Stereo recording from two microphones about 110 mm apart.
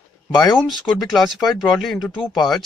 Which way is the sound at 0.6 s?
Centre (ahead or behind).